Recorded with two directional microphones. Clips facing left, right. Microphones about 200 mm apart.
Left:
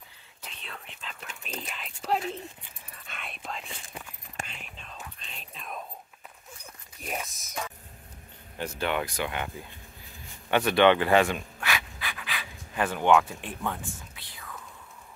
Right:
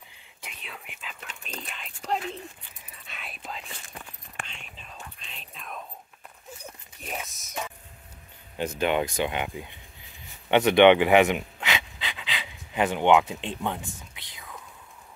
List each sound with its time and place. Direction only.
0.4 s whispering: 10° right (ahead or behind)
7.0 s whispering: centre (ahead or behind)
8.5 s speech: 20° right (ahead or behind)
10.5 s pant: 20° right (ahead or behind)